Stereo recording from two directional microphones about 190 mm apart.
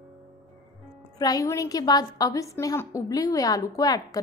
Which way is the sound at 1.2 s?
20° left (ahead or behind).